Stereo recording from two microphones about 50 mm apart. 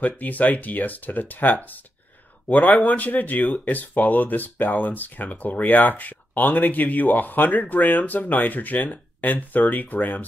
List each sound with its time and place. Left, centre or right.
0.0 s speech: left